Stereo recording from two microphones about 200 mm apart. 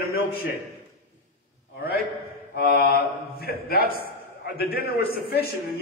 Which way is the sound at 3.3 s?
50° left (ahead or behind).